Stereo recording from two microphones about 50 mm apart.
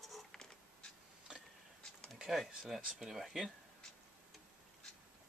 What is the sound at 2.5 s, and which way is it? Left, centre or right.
Speech, centre.